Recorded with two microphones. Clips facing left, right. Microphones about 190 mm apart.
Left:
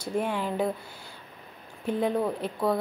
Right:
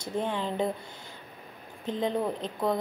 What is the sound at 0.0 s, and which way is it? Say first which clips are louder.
Speech: left 2 dB; 10° left (ahead or behind).